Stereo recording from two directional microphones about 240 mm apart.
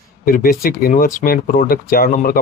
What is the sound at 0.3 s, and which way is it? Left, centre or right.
Speech, left.